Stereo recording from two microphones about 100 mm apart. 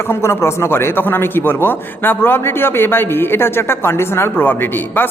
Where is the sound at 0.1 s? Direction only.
25° left (ahead or behind).